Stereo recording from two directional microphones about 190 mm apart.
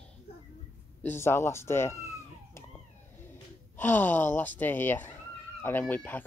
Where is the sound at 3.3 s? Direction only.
10° left (ahead or behind).